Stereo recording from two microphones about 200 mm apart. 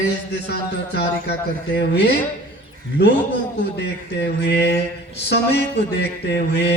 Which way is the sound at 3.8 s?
55° left (ahead or behind).